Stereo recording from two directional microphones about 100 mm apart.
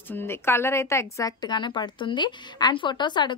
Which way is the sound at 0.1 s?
25° left (ahead or behind).